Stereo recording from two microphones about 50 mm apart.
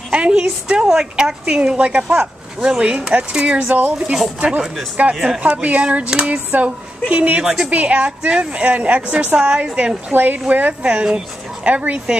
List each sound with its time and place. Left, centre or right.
0.1 s a woman's voice: right
3.6 s speech: right
4.4 s speech: centre
5.4 s speech: right
10.1 s speech: right
10.7 s speech: right